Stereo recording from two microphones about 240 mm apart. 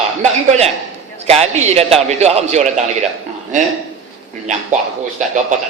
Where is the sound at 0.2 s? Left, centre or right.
Right.